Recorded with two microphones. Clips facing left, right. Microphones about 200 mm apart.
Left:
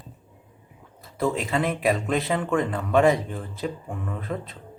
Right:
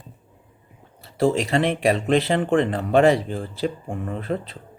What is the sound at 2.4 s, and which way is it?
Speech, 30° right (ahead or behind).